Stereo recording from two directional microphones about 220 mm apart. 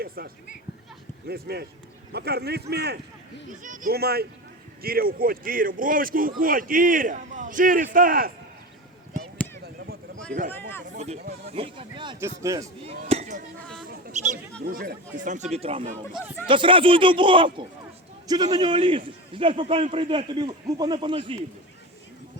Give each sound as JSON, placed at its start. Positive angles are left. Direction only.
{"t": 0.2, "sound": "a man's voice", "side_deg": -45}
{"t": 3.6, "sound": "a man's voice", "side_deg": -35}
{"t": 10.3, "sound": "a man's voice", "side_deg": -40}
{"t": 12.8, "sound": "a sound", "side_deg": -30}
{"t": 14.6, "sound": "a man's voice", "side_deg": -40}
{"t": 16.1, "sound": "speech", "side_deg": -5}
{"t": 16.5, "sound": "a man's voice", "side_deg": -20}